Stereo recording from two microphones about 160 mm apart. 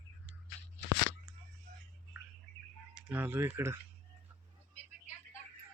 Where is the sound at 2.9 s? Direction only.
10° right (ahead or behind).